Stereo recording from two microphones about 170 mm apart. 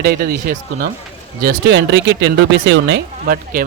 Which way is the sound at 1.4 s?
80° right.